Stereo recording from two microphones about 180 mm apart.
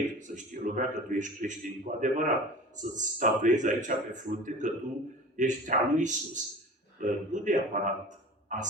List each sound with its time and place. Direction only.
0.2 s a man's voice: 45° right (ahead or behind)